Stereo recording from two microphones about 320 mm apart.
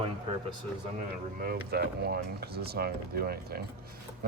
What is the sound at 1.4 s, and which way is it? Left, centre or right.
Speech, right.